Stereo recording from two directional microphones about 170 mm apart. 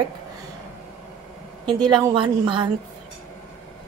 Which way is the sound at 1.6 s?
25° right (ahead or behind).